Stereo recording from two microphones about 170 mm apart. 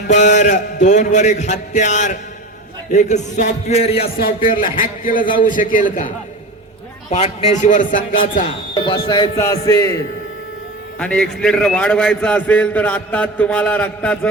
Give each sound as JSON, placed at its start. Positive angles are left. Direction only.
{"t": 0.1, "sound": "a man's voice", "side_deg": 45}
{"t": 4.8, "sound": "a man's voice", "side_deg": 55}
{"t": 7.1, "sound": "a man's voice", "side_deg": 40}
{"t": 8.7, "sound": "speech", "side_deg": 25}
{"t": 11.0, "sound": "a man's voice", "side_deg": 5}